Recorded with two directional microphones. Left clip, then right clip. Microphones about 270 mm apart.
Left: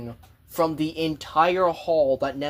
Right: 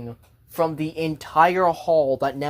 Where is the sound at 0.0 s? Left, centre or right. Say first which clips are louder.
Right 1 dB; centre.